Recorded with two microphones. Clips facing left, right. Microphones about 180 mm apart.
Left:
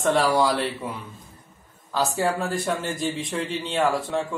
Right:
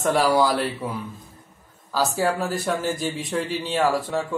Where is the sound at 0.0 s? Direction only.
Centre (ahead or behind).